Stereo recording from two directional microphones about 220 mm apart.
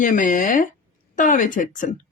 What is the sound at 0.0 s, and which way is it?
Speech, 35° left (ahead or behind).